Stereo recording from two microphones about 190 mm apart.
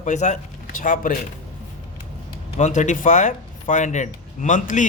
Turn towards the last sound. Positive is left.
turn(degrees=40)  # may be behind; listen again after turning